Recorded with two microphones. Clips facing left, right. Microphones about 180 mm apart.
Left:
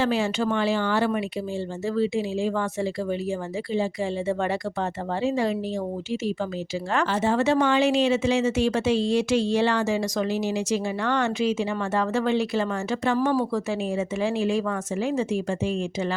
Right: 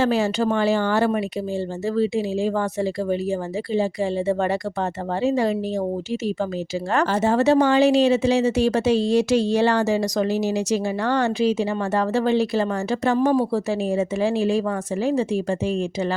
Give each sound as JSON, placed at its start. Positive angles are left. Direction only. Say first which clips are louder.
{"t": 0.0, "sound": "speech", "louder": "right 3 dB", "side_deg": -40}
{"t": 6.9, "sound": "speech", "louder": "right 3 dB", "side_deg": -40}